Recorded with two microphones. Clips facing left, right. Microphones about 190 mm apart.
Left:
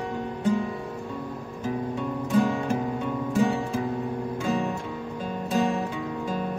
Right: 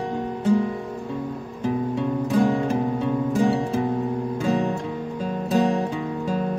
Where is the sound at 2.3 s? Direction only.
35° right (ahead or behind).